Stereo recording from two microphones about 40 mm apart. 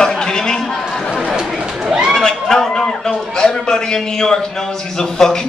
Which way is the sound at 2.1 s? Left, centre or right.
Centre.